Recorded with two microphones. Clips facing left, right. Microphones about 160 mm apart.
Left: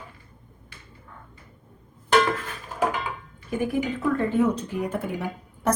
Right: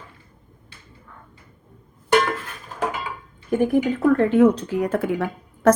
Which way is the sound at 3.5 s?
50° right (ahead or behind).